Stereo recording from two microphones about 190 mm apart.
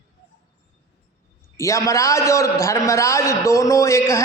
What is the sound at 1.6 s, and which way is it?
A man's voice, 15° left (ahead or behind).